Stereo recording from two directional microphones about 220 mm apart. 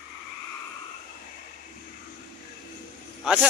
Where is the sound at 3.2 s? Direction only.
Centre (ahead or behind).